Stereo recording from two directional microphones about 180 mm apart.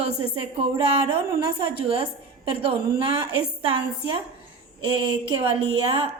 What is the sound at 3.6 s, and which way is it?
A woman's voice, 30° right (ahead or behind).